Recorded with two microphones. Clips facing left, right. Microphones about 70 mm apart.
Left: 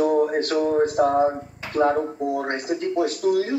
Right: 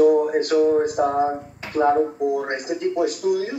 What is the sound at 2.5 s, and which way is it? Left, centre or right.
A man's voice, centre.